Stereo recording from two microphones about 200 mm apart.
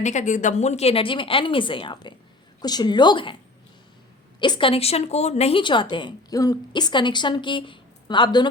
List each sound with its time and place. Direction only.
0.0 s a woman's voice: 35° left (ahead or behind)
4.4 s a woman's voice: 25° left (ahead or behind)